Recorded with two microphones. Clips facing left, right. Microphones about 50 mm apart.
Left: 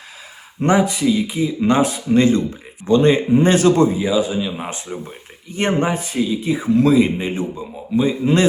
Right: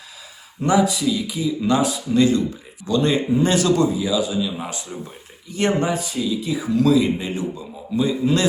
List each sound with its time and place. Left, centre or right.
0.6 s a man's voice: left